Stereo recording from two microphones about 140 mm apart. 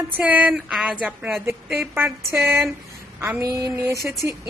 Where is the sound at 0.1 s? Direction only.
10° right (ahead or behind).